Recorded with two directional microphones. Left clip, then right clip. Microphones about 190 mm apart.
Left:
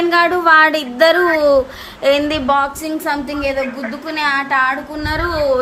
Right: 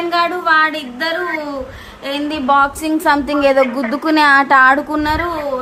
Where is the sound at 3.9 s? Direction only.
25° right (ahead or behind).